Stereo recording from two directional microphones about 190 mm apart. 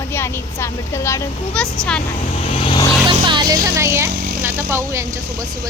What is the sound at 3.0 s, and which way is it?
Music, 25° right (ahead or behind).